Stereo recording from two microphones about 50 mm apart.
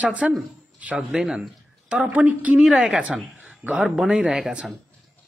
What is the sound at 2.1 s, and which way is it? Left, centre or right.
Speech, right.